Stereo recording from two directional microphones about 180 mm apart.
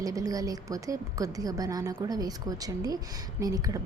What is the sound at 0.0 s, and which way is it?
A woman's voice, 20° right (ahead or behind).